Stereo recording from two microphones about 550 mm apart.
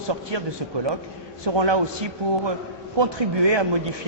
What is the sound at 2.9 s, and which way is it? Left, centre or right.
Speech, right.